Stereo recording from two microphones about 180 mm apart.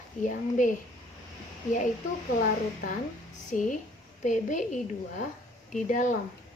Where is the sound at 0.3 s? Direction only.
45° left (ahead or behind).